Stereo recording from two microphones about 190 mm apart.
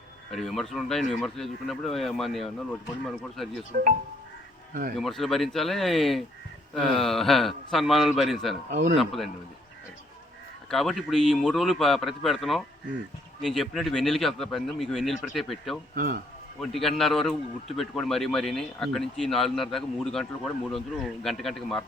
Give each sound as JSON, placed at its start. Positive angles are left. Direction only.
{"t": 0.3, "sound": "a man's voice", "side_deg": 0}
{"t": 4.7, "sound": "speech", "side_deg": -50}
{"t": 4.9, "sound": "a man's voice", "side_deg": 0}
{"t": 10.7, "sound": "a man's voice", "side_deg": 0}